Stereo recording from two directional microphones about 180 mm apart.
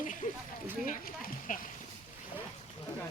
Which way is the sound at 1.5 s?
45° left (ahead or behind).